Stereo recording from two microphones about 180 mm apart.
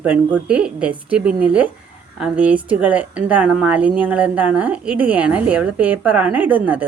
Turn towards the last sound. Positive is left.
turn(degrees=-10)  # may be behind; listen again after turning